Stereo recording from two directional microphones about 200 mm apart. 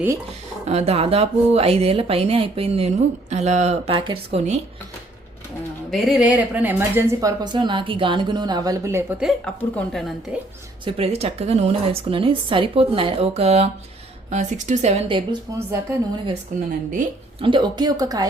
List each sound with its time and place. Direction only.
0.6 s speech: 30° right (ahead or behind)
5.9 s speech: centre (ahead or behind)
9.2 s a woman's voice: 5° left (ahead or behind)
10.8 s speech: 30° right (ahead or behind)
15.5 s speech: 15° right (ahead or behind)
16.5 s speech: 35° right (ahead or behind)
17.4 s speech: 25° right (ahead or behind)